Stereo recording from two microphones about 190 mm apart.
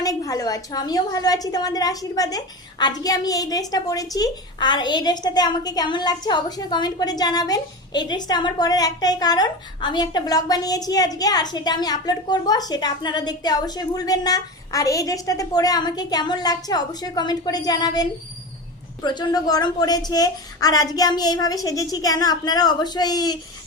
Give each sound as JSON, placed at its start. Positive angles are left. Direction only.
{"t": 0.0, "sound": "a woman's voice", "side_deg": 20}